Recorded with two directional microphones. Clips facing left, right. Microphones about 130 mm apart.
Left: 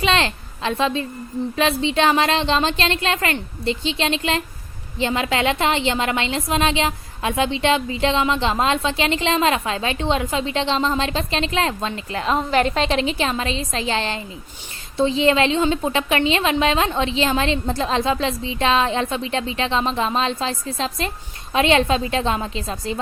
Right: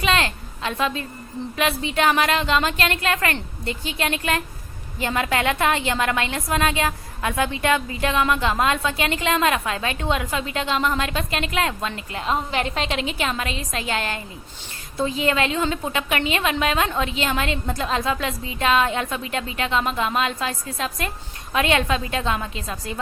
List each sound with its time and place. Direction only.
0.0 s a woman's voice: 30° left (ahead or behind)